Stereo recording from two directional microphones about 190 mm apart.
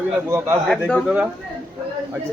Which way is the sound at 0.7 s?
5° left (ahead or behind).